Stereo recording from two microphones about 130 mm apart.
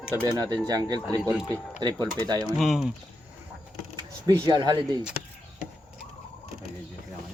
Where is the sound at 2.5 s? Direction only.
5° right (ahead or behind).